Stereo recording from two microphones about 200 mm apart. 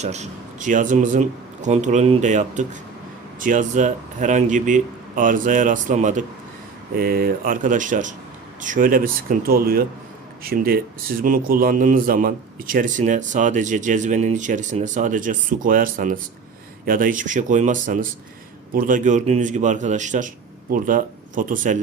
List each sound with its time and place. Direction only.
0.0 s speech: 35° right (ahead or behind)
6.9 s speech: 50° right (ahead or behind)